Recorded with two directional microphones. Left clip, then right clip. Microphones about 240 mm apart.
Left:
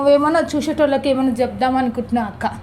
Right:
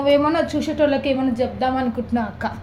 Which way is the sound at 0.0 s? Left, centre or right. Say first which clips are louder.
Left 3 dB; left.